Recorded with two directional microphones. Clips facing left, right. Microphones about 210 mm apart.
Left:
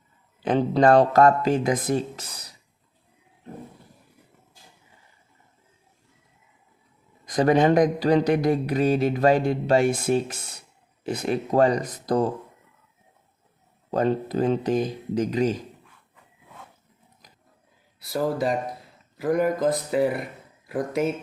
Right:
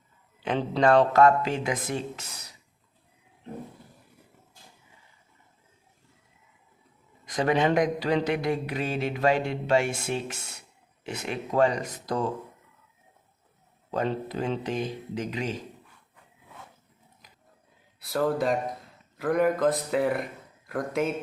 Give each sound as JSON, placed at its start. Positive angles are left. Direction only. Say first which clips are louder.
{"t": 0.4, "sound": "a man's voice", "louder": "left 4 dB", "side_deg": 40}
{"t": 7.3, "sound": "a man's voice", "louder": "left 5 dB", "side_deg": 40}
{"t": 13.9, "sound": "a man's voice", "louder": "left 6 dB", "side_deg": 40}
{"t": 18.0, "sound": "speech", "louder": "left 1 dB", "side_deg": 0}